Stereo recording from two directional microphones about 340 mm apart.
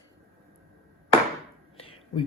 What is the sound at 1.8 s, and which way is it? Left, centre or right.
Whispering, centre.